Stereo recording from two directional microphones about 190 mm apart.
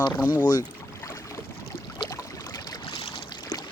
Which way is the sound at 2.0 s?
20° left (ahead or behind).